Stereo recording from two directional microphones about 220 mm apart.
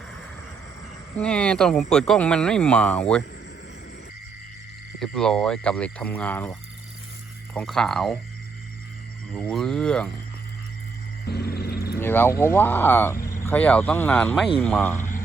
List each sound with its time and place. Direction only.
1.2 s speech: 5° left (ahead or behind)
4.9 s speech: centre (ahead or behind)
9.3 s speech: 5° left (ahead or behind)
11.3 s music: 45° left (ahead or behind)
11.9 s speech: 10° left (ahead or behind)